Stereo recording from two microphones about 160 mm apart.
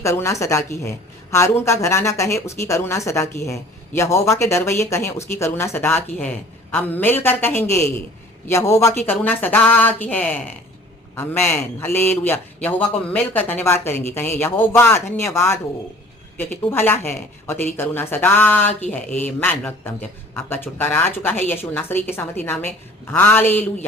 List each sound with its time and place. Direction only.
0.0 s a woman's voice: 20° left (ahead or behind)
16.7 s a woman's voice: 15° left (ahead or behind)